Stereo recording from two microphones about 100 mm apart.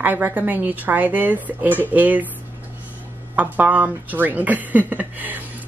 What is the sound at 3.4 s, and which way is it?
Speech, 15° right (ahead or behind).